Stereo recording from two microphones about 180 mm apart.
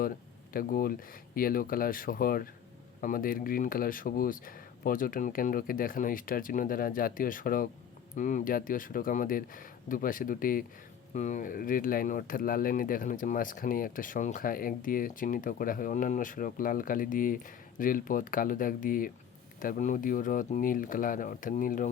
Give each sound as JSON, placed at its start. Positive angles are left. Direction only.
{"t": 0.5, "sound": "speech", "side_deg": 55}